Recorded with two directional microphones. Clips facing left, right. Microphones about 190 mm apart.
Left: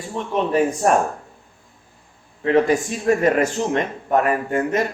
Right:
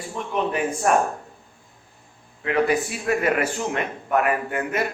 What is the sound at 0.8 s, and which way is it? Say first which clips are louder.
Speech: left 1 dB; 35° left (ahead or behind).